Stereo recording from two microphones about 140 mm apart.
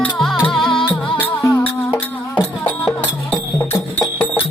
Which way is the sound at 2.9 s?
15° left (ahead or behind).